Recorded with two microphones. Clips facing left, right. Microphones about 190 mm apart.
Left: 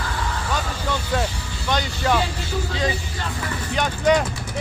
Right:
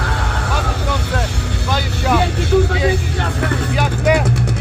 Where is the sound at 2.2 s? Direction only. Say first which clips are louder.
Right 10 dB; 65° right (ahead or behind).